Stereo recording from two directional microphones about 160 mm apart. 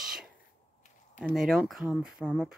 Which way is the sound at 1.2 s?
Centre (ahead or behind).